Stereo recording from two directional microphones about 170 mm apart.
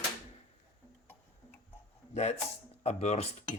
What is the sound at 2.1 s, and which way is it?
Speech, 40° left (ahead or behind).